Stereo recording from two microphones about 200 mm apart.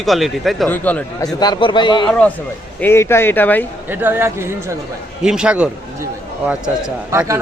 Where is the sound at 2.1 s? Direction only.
5° left (ahead or behind).